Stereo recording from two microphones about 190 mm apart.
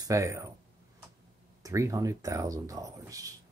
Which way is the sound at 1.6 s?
15° right (ahead or behind).